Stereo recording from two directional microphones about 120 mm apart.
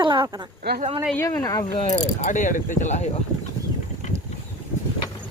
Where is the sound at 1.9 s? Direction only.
75° left (ahead or behind).